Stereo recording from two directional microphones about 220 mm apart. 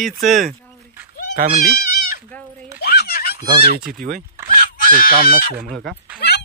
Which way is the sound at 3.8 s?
40° right (ahead or behind).